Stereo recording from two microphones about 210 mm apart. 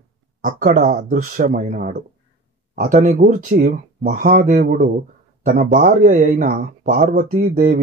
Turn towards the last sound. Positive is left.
turn(degrees=-40)  # may be behind; listen again after turning